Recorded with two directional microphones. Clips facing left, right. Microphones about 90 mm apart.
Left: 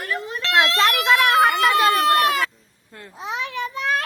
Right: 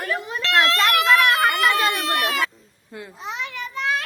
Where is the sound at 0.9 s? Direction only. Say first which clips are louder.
Right 1 dB; 25° left (ahead or behind).